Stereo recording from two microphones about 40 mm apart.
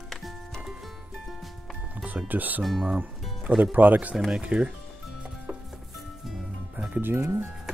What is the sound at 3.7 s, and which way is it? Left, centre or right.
Speech, right.